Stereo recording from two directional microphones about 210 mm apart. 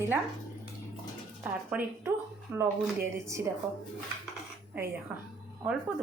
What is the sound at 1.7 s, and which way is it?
A woman's voice, 5° right (ahead or behind).